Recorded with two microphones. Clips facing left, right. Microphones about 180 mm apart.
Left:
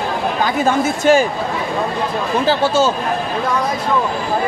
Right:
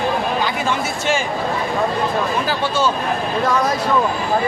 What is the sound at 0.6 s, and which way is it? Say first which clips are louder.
Speech: left 7 dB; 40° left (ahead or behind).